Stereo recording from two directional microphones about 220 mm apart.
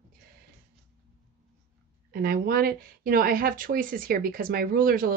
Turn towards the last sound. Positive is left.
turn(degrees=-40)  # may be behind; listen again after turning